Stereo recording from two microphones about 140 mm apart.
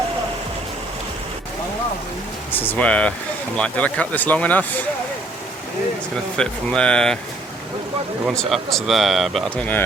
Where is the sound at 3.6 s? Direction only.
10° left (ahead or behind).